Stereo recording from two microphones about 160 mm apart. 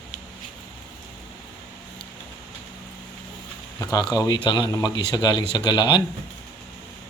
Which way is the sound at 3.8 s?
25° left (ahead or behind).